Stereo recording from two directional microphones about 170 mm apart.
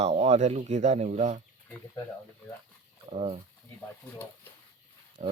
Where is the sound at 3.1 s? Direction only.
35° right (ahead or behind).